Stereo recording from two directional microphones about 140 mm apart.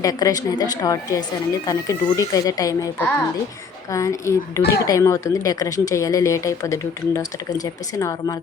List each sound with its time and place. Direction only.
0.0 s speech: 25° left (ahead or behind)
3.9 s speech: 20° left (ahead or behind)